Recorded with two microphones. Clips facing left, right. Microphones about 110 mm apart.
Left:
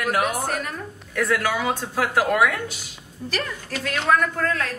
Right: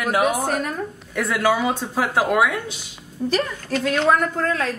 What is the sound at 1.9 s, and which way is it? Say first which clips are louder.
Speech: right 1 dB; 20° right (ahead or behind).